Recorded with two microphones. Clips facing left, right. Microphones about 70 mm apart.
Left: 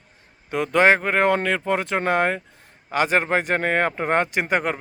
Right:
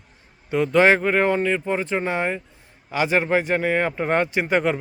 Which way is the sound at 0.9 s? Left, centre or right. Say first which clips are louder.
Even; left.